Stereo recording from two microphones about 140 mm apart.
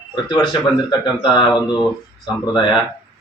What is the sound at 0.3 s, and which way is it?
Speech, 30° left (ahead or behind).